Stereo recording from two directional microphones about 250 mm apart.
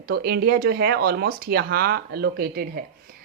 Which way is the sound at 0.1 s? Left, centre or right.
Right.